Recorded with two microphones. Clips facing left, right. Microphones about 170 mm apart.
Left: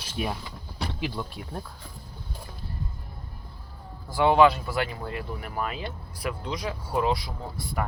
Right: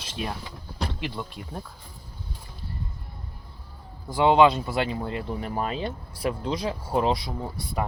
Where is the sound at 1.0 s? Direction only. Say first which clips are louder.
Left 1 dB; centre (ahead or behind).